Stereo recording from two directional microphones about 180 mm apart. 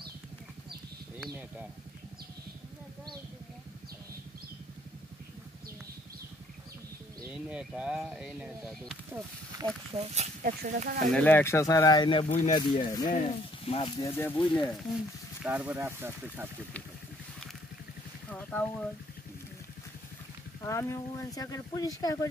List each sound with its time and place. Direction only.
1.2 s speech: 10° right (ahead or behind)
7.2 s speech: 5° right (ahead or behind)
9.6 s speech: 30° right (ahead or behind)
10.6 s speech: 50° right (ahead or behind)
11.1 s speech: 10° left (ahead or behind); by 12.3 s 25° left (ahead or behind)
12.3 s speech: 40° left (ahead or behind)
12.5 s speech: 25° left (ahead or behind)
13.1 s speech: 35° left (ahead or behind)
14.0 s speech: 10° left (ahead or behind)
15.4 s speech: 10° right (ahead or behind)
18.3 s a sound: 10° left (ahead or behind)
20.6 s speech: 15° left (ahead or behind)